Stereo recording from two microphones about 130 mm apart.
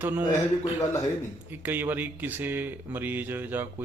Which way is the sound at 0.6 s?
30° left (ahead or behind).